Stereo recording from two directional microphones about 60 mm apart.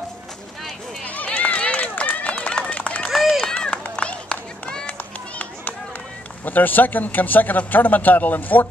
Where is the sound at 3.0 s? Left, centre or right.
Centre.